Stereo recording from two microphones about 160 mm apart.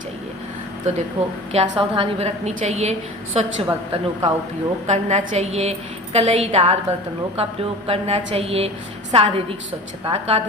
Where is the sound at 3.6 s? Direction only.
35° right (ahead or behind).